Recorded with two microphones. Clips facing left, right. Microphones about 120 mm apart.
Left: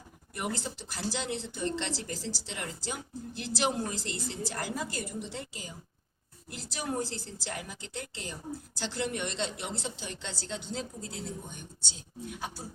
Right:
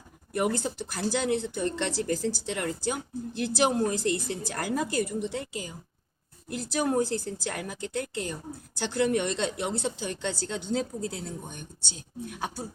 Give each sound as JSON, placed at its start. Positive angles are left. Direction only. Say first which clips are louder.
{"t": 0.5, "sound": "a woman's voice", "louder": "right 6 dB", "side_deg": -55}